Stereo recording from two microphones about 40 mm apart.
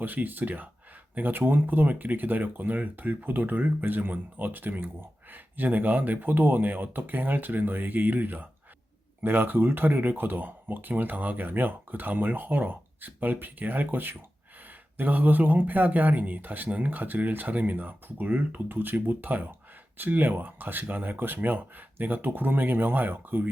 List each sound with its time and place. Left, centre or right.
0.0 s speech: right